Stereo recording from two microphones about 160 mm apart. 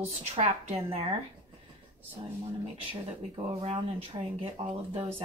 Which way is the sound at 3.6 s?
35° right (ahead or behind).